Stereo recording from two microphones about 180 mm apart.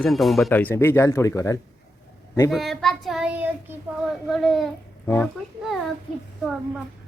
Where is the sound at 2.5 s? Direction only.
Centre (ahead or behind).